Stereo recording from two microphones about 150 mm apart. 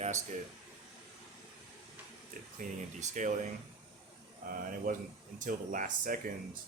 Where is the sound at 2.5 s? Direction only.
55° right (ahead or behind).